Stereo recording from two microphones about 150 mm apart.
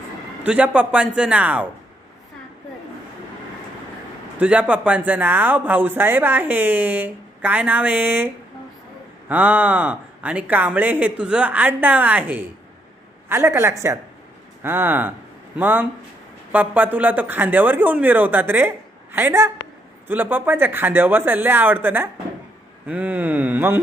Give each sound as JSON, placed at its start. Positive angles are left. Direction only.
{"t": 0.4, "sound": "speech", "side_deg": -10}
{"t": 4.4, "sound": "speech", "side_deg": -10}
{"t": 9.3, "sound": "speech", "side_deg": -10}